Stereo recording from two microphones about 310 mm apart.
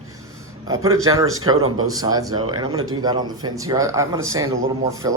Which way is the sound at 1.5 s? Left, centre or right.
Right.